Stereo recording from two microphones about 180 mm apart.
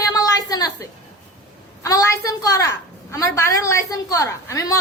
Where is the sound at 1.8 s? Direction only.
15° left (ahead or behind).